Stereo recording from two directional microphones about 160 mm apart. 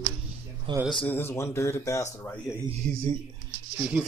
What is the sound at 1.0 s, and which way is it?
Speech, 15° left (ahead or behind).